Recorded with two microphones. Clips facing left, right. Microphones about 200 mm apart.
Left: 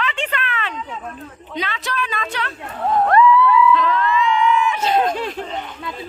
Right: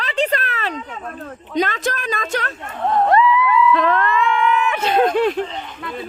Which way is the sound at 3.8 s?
55° right (ahead or behind).